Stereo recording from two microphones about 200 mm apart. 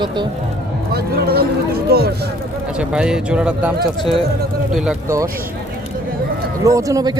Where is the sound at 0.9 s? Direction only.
50° right (ahead or behind).